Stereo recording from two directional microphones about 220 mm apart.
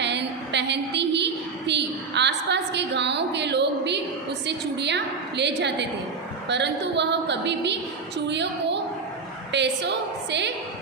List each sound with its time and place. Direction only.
0.0 s a woman's voice: 50° right (ahead or behind)